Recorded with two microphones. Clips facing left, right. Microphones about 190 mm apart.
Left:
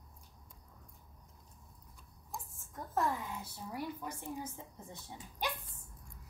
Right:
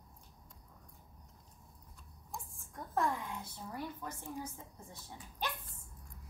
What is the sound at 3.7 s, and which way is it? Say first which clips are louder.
Speech: left 2 dB; 15° left (ahead or behind).